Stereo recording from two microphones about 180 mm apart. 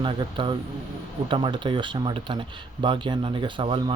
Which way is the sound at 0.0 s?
25° right (ahead or behind).